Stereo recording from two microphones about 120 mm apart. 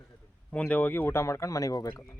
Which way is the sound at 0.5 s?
10° left (ahead or behind).